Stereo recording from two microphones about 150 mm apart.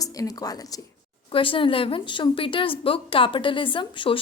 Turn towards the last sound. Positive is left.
turn(degrees=35)  # may be behind; listen again after turning